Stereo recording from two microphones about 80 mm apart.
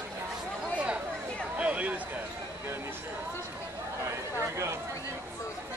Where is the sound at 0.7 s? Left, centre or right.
Centre.